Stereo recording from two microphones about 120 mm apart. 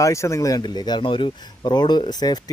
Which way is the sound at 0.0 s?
25° left (ahead or behind).